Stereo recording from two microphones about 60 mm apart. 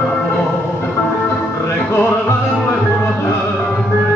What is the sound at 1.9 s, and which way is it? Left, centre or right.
Music, left.